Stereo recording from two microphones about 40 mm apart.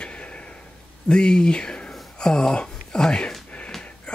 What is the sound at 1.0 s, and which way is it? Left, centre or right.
Speech, left.